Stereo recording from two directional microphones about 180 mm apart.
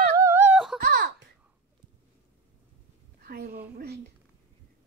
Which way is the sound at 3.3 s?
55° right (ahead or behind).